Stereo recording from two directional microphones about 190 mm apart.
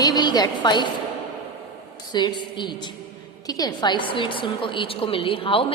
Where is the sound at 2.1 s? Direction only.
25° left (ahead or behind).